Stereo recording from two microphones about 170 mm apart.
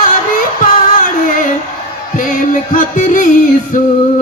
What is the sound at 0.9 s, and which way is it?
Music, 55° left (ahead or behind).